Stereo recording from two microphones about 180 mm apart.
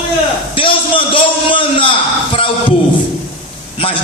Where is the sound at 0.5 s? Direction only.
30° left (ahead or behind).